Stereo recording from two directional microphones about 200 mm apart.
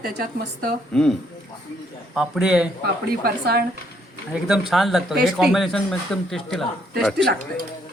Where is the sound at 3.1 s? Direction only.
50° right (ahead or behind).